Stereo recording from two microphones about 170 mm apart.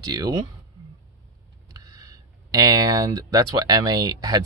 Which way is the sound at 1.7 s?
20° right (ahead or behind).